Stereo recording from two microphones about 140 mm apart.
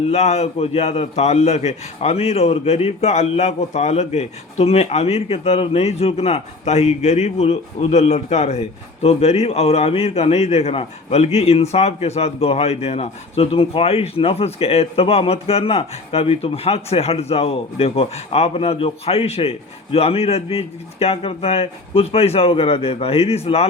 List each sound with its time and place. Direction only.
0.0 s a man's voice: 50° left (ahead or behind)